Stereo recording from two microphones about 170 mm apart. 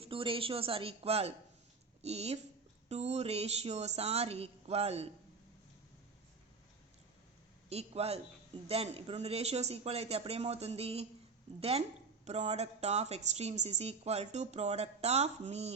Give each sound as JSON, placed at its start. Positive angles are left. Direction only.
{"t": 0.0, "sound": "a woman's voice", "side_deg": -30}
{"t": 7.7, "sound": "speech", "side_deg": -35}
{"t": 12.2, "sound": "speech", "side_deg": -40}